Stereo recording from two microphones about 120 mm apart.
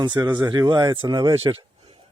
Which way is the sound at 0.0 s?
40° right (ahead or behind).